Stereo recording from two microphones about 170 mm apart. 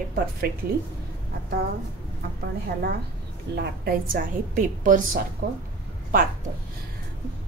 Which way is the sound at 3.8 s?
55° right (ahead or behind).